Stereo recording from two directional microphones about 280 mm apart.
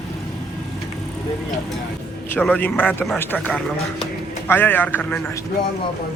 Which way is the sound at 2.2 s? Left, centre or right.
Centre.